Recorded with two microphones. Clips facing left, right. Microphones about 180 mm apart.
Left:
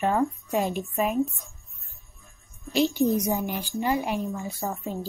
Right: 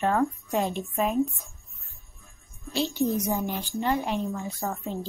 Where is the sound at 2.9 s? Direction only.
15° left (ahead or behind).